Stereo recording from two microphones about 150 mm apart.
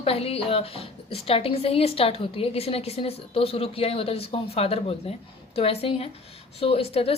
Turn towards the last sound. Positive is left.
turn(degrees=40)  # may be behind; listen again after turning